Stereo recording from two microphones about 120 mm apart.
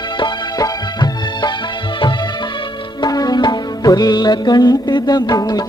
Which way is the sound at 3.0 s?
30° left (ahead or behind).